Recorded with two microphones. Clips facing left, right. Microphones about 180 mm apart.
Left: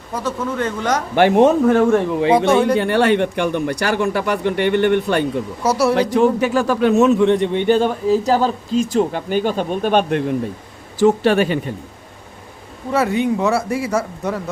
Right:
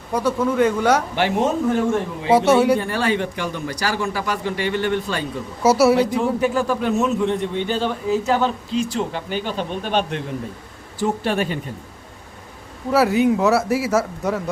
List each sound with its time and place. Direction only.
0.1 s speech: 10° right (ahead or behind)
1.1 s a man's voice: 60° left (ahead or behind)
2.3 s speech: 5° right (ahead or behind)
2.7 s a man's voice: 65° left (ahead or behind)
5.6 s speech: 5° right (ahead or behind)
6.0 s a man's voice: 80° left
8.0 s speech: 35° left (ahead or behind); by 10.2 s 55° left (ahead or behind)
11.0 s a man's voice: 80° left
12.9 s speech: centre (ahead or behind)